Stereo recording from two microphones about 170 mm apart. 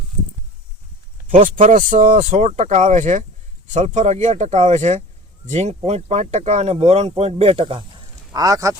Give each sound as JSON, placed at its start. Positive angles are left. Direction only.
{"t": 1.3, "sound": "speech", "side_deg": -45}